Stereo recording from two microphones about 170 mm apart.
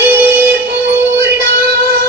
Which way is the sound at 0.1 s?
70° right (ahead or behind).